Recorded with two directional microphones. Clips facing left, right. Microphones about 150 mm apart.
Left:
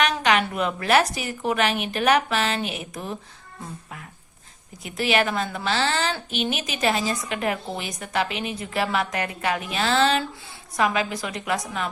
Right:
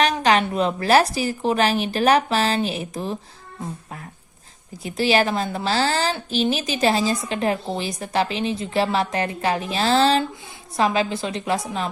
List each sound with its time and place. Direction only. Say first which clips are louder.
0.0 s a woman's voice: right 3 dB; 35° right (ahead or behind)
4.8 s a woman's voice: right 3 dB; 30° right (ahead or behind)